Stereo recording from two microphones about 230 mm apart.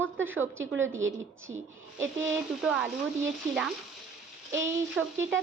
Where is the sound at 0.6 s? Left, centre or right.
Right.